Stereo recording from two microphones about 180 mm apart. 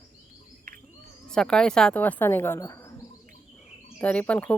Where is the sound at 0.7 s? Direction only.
45° right (ahead or behind).